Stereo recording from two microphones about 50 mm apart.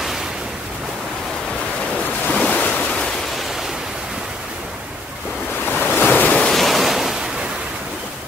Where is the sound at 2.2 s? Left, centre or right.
Left.